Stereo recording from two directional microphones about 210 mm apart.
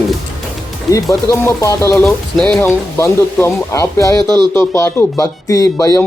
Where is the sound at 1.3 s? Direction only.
15° left (ahead or behind).